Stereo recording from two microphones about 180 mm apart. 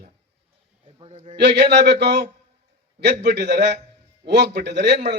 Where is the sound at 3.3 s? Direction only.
70° right (ahead or behind).